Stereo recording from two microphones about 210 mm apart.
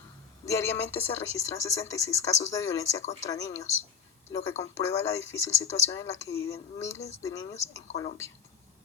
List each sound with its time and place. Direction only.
0.4 s speech: 15° left (ahead or behind)